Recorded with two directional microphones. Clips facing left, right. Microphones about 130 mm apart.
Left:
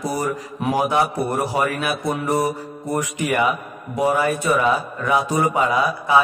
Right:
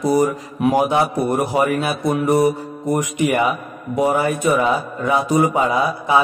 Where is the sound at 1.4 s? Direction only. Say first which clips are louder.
Right 4 dB; 25° right (ahead or behind).